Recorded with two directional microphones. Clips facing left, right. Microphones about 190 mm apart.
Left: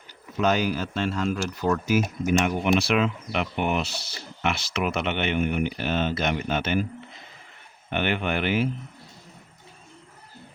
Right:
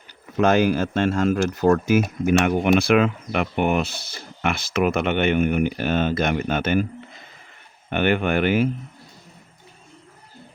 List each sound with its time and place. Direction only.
0.3 s speech: 50° right (ahead or behind)
7.9 s speech: 50° right (ahead or behind)